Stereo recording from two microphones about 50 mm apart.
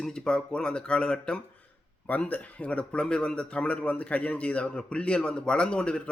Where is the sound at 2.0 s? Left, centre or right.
Left.